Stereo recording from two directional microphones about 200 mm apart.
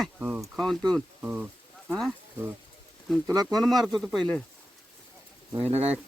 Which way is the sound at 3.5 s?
Centre (ahead or behind).